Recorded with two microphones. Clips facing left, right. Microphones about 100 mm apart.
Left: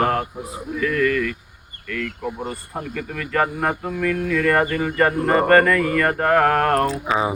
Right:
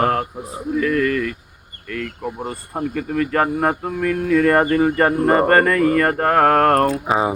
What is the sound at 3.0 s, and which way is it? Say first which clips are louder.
Speech: right 3 dB; 35° right (ahead or behind).